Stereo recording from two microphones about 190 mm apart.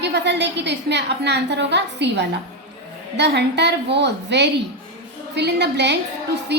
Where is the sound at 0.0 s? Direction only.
65° right (ahead or behind).